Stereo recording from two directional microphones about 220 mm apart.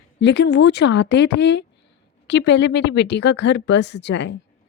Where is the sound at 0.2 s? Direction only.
50° left (ahead or behind).